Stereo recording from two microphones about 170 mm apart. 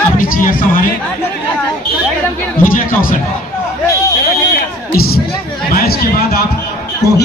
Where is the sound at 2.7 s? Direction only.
55° left (ahead or behind).